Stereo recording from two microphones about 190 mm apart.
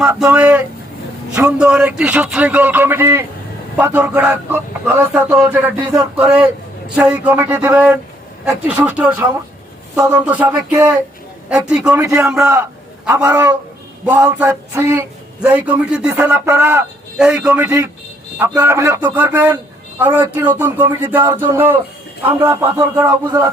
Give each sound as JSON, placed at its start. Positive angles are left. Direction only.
{"t": 0.0, "sound": "a man's voice", "side_deg": -5}
{"t": 11.8, "sound": "a man's voice", "side_deg": -15}
{"t": 12.3, "sound": "speech", "side_deg": -5}
{"t": 13.2, "sound": "a man's voice", "side_deg": -15}